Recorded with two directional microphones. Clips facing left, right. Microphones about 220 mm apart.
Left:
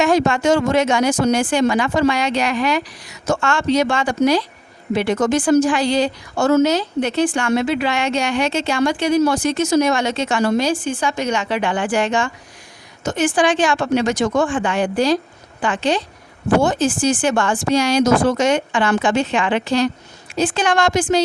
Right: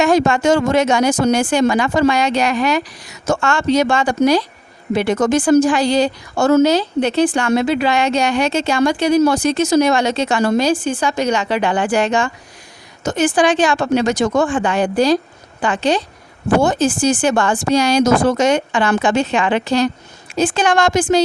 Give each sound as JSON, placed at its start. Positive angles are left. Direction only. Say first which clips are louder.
{"t": 0.0, "sound": "a woman's voice", "louder": "right 2 dB", "side_deg": -45}